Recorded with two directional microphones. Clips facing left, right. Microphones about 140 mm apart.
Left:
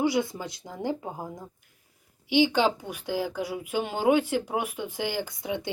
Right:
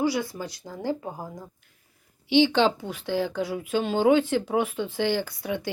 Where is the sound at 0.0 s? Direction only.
20° left (ahead or behind).